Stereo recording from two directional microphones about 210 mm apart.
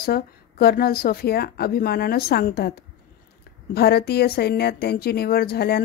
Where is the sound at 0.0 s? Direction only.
50° left (ahead or behind).